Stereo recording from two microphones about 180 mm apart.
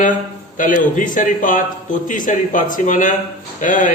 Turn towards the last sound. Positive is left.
turn(degrees=45)  # may be behind; listen again after turning